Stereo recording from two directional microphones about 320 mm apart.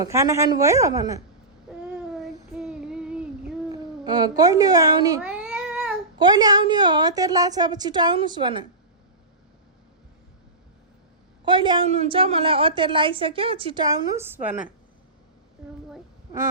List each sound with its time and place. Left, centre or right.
0.0 s a woman's voice: centre
1.7 s a sound: centre
2.1 s child singing: centre
4.0 s a woman's voice: centre
11.4 s a woman's voice: centre